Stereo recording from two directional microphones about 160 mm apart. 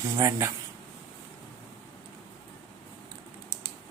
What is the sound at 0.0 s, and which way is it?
Speech, 20° right (ahead or behind).